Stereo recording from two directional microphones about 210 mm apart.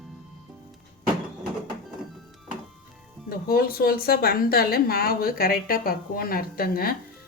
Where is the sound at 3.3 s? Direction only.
45° left (ahead or behind).